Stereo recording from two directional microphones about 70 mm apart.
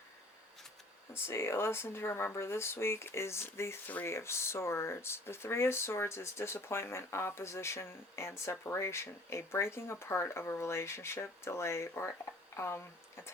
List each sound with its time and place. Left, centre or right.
1.1 s speech: left